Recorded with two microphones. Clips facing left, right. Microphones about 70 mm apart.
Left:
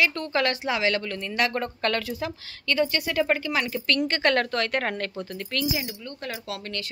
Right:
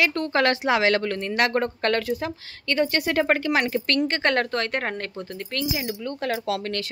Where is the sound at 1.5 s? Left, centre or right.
Right.